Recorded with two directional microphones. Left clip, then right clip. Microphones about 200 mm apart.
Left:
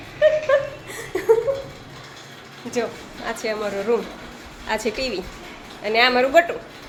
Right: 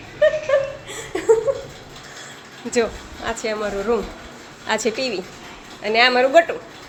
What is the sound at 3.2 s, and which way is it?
Speech, 10° right (ahead or behind).